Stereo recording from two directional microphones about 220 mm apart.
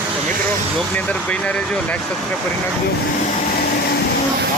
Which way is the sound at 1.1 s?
5° left (ahead or behind).